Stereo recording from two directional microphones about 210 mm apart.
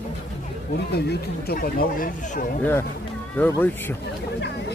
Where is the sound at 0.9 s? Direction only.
50° left (ahead or behind).